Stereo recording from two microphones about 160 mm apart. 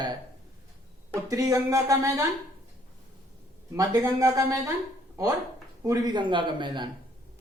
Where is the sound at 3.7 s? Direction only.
20° right (ahead or behind).